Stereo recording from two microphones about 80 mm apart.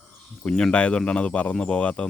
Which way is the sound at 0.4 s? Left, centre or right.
Centre.